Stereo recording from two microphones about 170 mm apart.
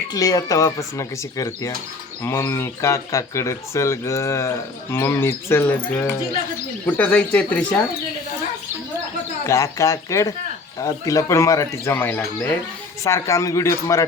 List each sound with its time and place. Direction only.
0.1 s speech: 20° left (ahead or behind)
9.5 s speech: 20° left (ahead or behind)